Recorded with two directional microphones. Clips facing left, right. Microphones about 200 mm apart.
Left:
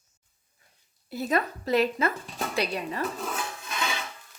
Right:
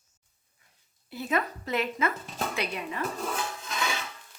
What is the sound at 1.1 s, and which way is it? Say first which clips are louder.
A woman's voice: left 3 dB; 40° left (ahead or behind).